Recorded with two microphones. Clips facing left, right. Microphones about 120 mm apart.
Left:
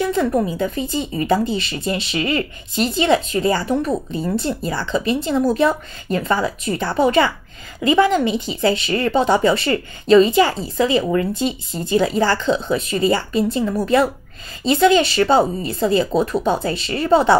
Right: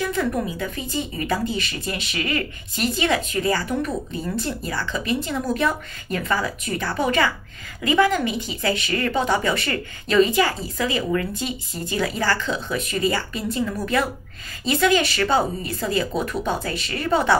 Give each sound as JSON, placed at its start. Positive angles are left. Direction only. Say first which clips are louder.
{"t": 0.0, "sound": "a woman's voice", "louder": "left 5 dB", "side_deg": 30}